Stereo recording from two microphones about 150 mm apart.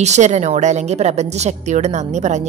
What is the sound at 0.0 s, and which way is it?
A woman's voice, 50° right (ahead or behind).